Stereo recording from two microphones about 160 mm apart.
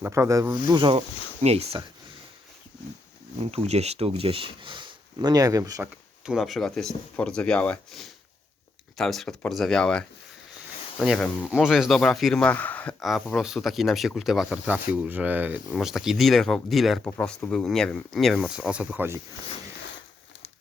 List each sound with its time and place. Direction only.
0.0 s speech: 20° right (ahead or behind)
1.4 s speech: 40° right (ahead or behind)
3.4 s speech: 40° right (ahead or behind); by 5.9 s 20° right (ahead or behind)
6.2 s speech: centre (ahead or behind)
13.1 s speech: centre (ahead or behind)
17.0 s speech: 10° left (ahead or behind); by 19.2 s 10° right (ahead or behind)